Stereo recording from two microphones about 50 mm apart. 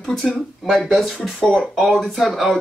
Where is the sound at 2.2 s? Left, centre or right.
Centre.